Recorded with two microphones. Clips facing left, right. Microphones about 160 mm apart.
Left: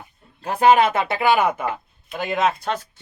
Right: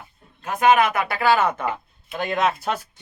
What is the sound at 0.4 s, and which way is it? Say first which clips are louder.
Speech: left 2 dB; 30° left (ahead or behind).